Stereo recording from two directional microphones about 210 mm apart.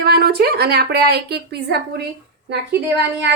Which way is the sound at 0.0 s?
50° right (ahead or behind).